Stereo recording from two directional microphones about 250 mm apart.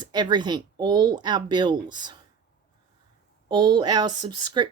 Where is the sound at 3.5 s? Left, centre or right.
Centre.